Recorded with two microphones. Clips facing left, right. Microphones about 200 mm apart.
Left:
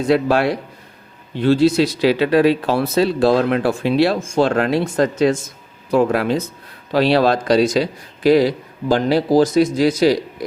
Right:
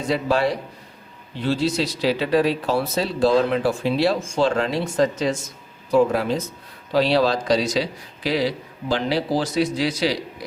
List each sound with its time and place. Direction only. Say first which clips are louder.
0.1 s speech: left 4 dB; 65° left (ahead or behind); by 10.2 s 45° left (ahead or behind)